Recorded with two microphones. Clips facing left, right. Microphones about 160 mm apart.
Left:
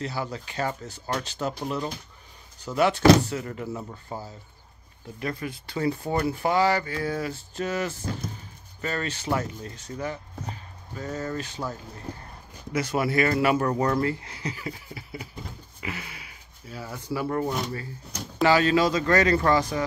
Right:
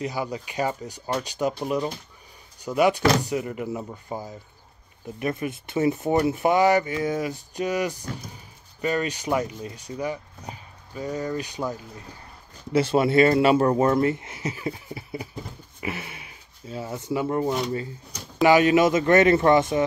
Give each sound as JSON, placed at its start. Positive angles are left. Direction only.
{"t": 0.0, "sound": "speech", "side_deg": -15}
{"t": 2.6, "sound": "speech", "side_deg": -15}